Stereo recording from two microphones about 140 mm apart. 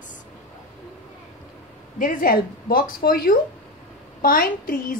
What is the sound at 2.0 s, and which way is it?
A woman's voice, 90° left.